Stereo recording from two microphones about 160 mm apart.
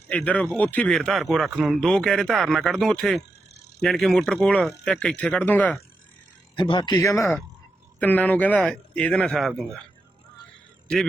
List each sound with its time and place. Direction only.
0.1 s speech: 10° left (ahead or behind)
6.6 s speech: 30° left (ahead or behind); by 9.8 s centre (ahead or behind)
10.8 s a man's voice: centre (ahead or behind)